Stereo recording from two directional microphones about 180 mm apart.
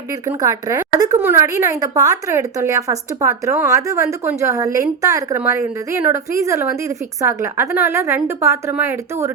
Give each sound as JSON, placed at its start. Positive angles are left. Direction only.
{"t": 0.3, "sound": "a woman's voice", "side_deg": -20}